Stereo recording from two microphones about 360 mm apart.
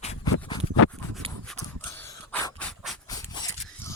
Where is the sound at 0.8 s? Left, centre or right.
Left.